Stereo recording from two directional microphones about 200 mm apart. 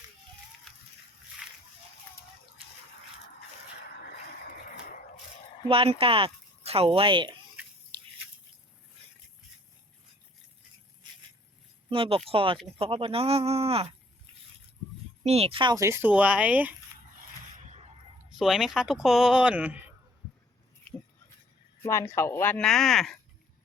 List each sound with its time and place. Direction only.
1.4 s splash: 5° right (ahead or behind)
5.6 s speech: 25° right (ahead or behind)
11.9 s speech: 25° right (ahead or behind)
15.2 s speech: 30° right (ahead or behind); by 16.7 s 5° right (ahead or behind)
18.3 s speech: centre (ahead or behind)
21.8 s speech: 15° left (ahead or behind)